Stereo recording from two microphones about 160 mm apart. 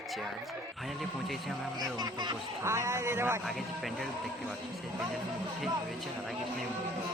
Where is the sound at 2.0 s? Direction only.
25° right (ahead or behind).